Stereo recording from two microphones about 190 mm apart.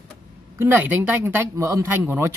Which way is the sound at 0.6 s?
10° right (ahead or behind).